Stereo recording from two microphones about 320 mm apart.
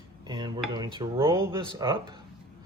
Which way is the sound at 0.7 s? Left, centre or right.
Centre.